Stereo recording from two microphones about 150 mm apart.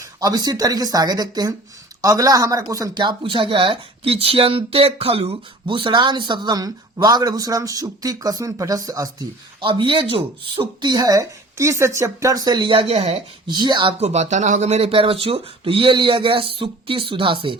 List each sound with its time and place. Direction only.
0.0 s speech: 25° right (ahead or behind); by 13.1 s 45° right (ahead or behind)
13.5 s speech: 30° right (ahead or behind)
14.1 s speech: 50° right (ahead or behind)